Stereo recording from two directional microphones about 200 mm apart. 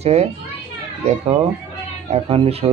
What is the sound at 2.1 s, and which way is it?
Speech, 30° right (ahead or behind).